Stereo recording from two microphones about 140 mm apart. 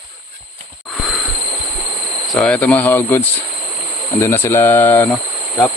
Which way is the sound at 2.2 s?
5° left (ahead or behind).